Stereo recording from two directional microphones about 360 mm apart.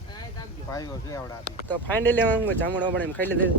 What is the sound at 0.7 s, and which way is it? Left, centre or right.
Speech, centre.